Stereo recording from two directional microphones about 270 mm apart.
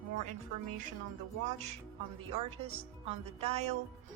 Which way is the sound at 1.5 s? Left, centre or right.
Right.